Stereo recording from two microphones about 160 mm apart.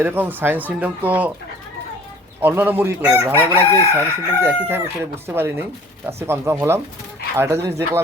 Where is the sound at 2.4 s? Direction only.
10° right (ahead or behind).